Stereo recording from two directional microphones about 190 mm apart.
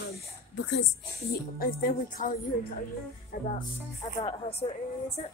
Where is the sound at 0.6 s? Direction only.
75° left (ahead or behind).